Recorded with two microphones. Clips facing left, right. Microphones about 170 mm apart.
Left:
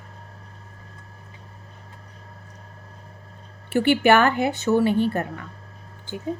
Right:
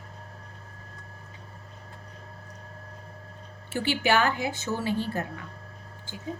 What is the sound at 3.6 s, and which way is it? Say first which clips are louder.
A woman's voice: left 9 dB; 60° left (ahead or behind).